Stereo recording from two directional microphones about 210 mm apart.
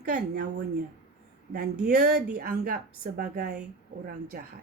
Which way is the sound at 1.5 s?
45° right (ahead or behind).